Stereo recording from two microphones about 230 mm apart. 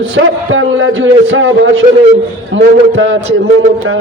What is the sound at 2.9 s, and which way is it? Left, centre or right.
Speech, right.